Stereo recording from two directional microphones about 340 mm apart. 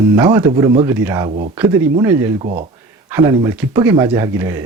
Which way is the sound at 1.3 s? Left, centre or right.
Right.